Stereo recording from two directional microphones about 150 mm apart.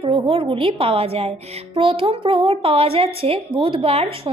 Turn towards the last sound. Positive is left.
turn(degrees=-40)  # may be behind; listen again after turning